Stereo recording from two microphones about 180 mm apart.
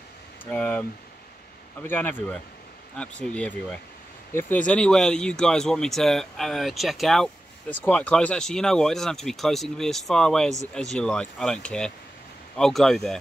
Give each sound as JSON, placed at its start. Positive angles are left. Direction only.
{"t": 0.5, "sound": "speech", "side_deg": 10}